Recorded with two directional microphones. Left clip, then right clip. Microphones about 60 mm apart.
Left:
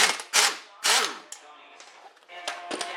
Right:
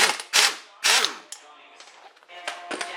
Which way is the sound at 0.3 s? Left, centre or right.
Right.